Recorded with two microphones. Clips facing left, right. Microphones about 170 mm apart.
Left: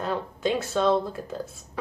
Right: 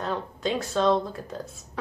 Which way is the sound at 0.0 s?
5° left (ahead or behind).